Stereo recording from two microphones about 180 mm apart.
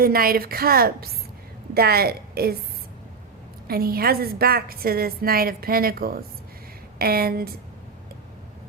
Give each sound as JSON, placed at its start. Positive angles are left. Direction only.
{"t": 0.0, "sound": "a woman's voice", "side_deg": -55}
{"t": 3.7, "sound": "a woman's voice", "side_deg": -55}